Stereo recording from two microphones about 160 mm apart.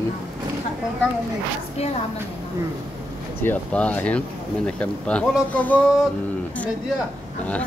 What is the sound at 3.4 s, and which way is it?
Speech, 10° left (ahead or behind).